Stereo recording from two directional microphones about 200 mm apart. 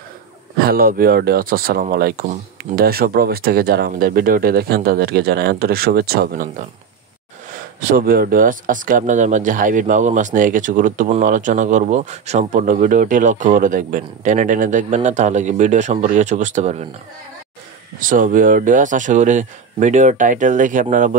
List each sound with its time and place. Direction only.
0.6 s speech: 50° right (ahead or behind)
7.9 s speech: 45° right (ahead or behind)
17.9 s speech: 45° right (ahead or behind)